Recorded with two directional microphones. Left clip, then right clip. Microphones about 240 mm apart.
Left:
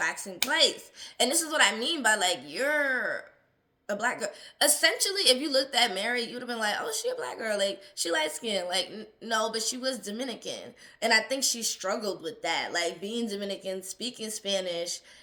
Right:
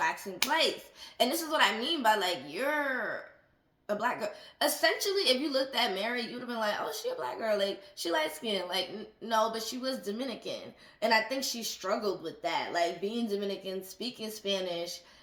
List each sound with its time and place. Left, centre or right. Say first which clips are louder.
0.0 s speech: left 1 dB; right